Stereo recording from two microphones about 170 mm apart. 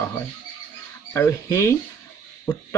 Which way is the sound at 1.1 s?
15° left (ahead or behind).